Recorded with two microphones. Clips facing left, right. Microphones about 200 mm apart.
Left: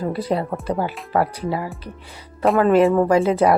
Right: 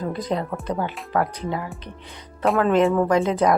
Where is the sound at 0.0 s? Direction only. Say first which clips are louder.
Left 3 dB; 10° left (ahead or behind).